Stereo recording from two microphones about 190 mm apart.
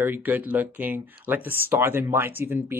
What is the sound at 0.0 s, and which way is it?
Speech, 10° right (ahead or behind).